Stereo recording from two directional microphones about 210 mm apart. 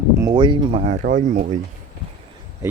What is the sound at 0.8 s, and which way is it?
Speech, 40° right (ahead or behind).